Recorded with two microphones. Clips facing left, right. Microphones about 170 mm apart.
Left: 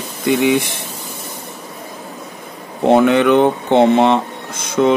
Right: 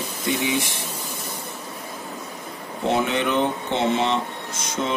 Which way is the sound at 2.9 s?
60° left (ahead or behind).